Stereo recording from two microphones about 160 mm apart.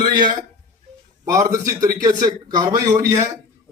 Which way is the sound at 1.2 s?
20° right (ahead or behind).